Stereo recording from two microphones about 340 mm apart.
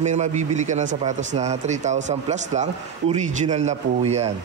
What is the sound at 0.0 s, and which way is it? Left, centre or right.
A man's voice, right.